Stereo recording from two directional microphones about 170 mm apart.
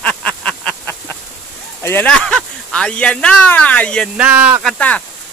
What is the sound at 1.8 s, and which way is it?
Speech, 10° left (ahead or behind).